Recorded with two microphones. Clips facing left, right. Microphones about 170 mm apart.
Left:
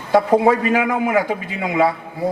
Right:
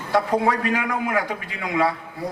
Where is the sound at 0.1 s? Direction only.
25° left (ahead or behind).